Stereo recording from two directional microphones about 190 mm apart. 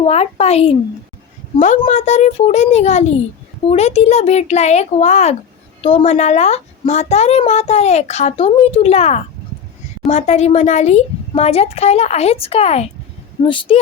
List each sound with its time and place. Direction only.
0.0 s a woman's voice: 35° left (ahead or behind)